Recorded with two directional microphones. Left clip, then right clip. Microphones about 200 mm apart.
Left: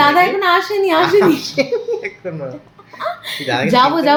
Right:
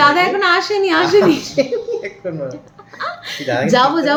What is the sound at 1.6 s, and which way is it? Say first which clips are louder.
Speech: even; 15° left (ahead or behind).